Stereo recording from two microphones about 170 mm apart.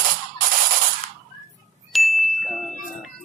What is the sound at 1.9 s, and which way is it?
Ding, centre (ahead or behind).